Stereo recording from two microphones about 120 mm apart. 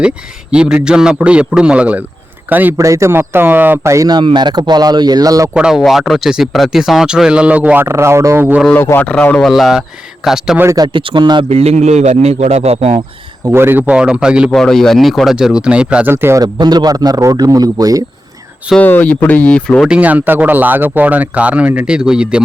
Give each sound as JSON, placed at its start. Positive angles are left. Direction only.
{"t": 0.5, "sound": "speech", "side_deg": -10}
{"t": 2.7, "sound": "speech", "side_deg": -25}
{"t": 4.2, "sound": "speech", "side_deg": -40}
{"t": 5.5, "sound": "speech", "side_deg": -5}
{"t": 8.7, "sound": "speech", "side_deg": 15}
{"t": 9.4, "sound": "speech", "side_deg": 0}
{"t": 10.8, "sound": "speech", "side_deg": -40}
{"t": 11.4, "sound": "a man's voice", "side_deg": -60}
{"t": 13.5, "sound": "speech", "side_deg": -20}
{"t": 14.5, "sound": "speech", "side_deg": 5}
{"t": 16.1, "sound": "speech", "side_deg": -20}
{"t": 16.4, "sound": "speech", "side_deg": -35}
{"t": 18.8, "sound": "speech", "side_deg": 15}
{"t": 19.8, "sound": "speech", "side_deg": -10}